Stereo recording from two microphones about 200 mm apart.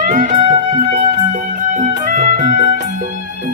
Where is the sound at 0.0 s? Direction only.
40° right (ahead or behind).